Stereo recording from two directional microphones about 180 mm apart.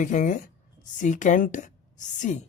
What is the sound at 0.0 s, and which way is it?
A woman's voice, 45° left (ahead or behind).